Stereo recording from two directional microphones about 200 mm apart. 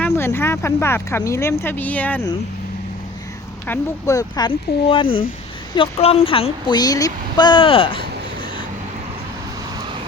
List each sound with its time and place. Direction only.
0.0 s speech: 10° left (ahead or behind)
3.7 s speech: 15° left (ahead or behind)